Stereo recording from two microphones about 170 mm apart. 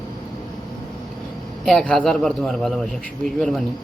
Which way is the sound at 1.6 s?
5° left (ahead or behind).